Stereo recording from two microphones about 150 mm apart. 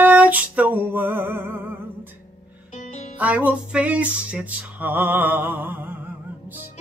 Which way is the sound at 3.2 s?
10° right (ahead or behind).